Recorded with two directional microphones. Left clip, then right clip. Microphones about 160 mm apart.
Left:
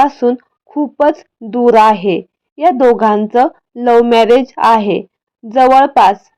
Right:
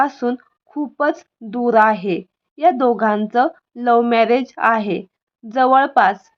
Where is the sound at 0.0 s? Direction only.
15° left (ahead or behind).